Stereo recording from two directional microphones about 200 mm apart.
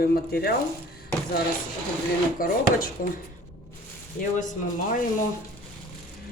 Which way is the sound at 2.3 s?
45° left (ahead or behind).